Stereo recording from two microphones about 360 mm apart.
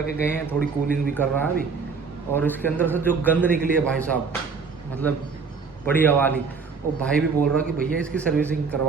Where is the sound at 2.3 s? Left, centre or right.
Centre.